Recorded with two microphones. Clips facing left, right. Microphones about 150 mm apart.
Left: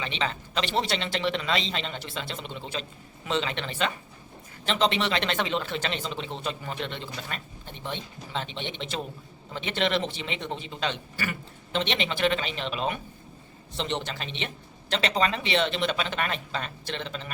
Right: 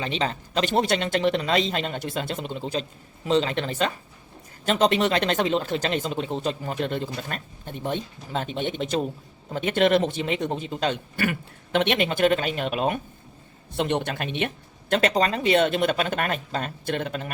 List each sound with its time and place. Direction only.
0.0 s speech: 40° right (ahead or behind)